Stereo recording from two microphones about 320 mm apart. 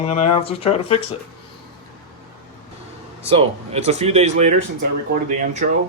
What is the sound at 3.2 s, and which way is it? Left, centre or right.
Speech, centre.